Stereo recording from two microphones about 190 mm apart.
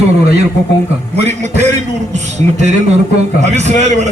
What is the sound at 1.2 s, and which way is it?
Speech, 35° right (ahead or behind).